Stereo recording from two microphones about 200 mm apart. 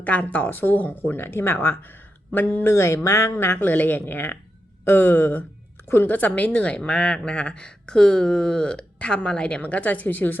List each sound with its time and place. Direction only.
0.0 s a woman's voice: 5° left (ahead or behind)